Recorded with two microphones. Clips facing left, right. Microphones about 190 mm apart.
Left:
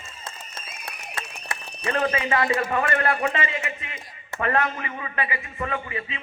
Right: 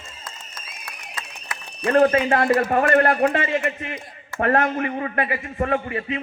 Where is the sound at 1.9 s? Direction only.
55° right (ahead or behind).